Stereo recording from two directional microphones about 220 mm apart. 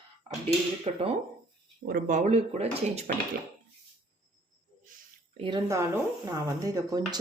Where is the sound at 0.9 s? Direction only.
30° right (ahead or behind).